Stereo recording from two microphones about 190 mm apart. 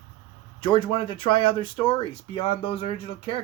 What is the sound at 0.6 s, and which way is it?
Speech, 25° left (ahead or behind).